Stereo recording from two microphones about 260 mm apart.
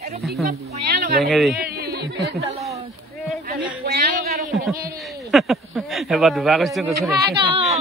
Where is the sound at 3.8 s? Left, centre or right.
Right.